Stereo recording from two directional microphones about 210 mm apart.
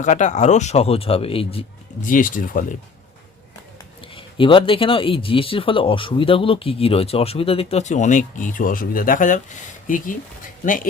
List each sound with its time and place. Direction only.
0.0 s a man's voice: 35° left (ahead or behind)
4.1 s speech: 25° left (ahead or behind); by 10.2 s 40° left (ahead or behind)